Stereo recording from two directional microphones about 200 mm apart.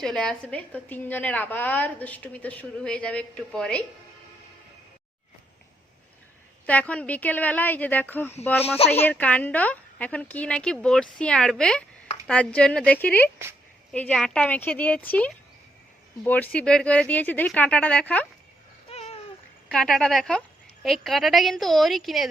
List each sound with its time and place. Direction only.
0.0 s a woman's voice: 5° left (ahead or behind)
6.7 s a woman's voice: 5° left (ahead or behind)
18.9 s babbling: 30° left (ahead or behind)
19.7 s speech: 5° left (ahead or behind)